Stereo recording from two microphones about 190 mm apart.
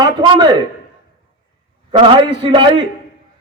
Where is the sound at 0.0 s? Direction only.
20° right (ahead or behind).